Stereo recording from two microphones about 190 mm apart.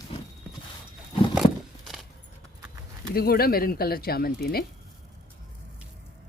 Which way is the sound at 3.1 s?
55° left (ahead or behind).